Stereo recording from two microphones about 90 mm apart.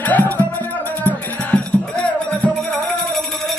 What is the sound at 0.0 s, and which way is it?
Music, 20° left (ahead or behind).